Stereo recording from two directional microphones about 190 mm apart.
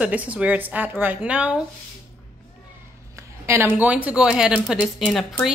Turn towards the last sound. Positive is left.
turn(degrees=0)  # may be behind; listen again after turning